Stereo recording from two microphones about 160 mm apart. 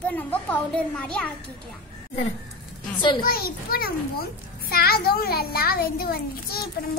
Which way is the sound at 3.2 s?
65° left (ahead or behind).